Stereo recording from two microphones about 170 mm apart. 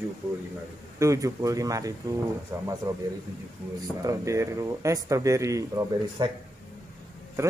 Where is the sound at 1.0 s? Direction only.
20° right (ahead or behind).